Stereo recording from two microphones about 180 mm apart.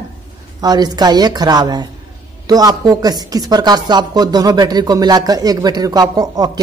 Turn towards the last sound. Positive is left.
turn(degrees=-20)  # may be behind; listen again after turning